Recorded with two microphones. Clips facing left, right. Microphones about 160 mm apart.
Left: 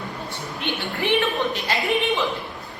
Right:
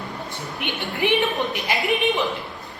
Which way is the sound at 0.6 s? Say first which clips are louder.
Right 2 dB; 15° right (ahead or behind).